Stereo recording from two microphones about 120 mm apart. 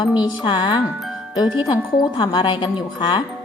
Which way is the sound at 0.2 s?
40° left (ahead or behind).